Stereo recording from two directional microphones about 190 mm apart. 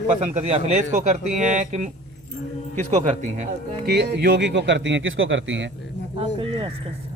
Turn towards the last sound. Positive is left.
turn(degrees=-30)  # may be behind; listen again after turning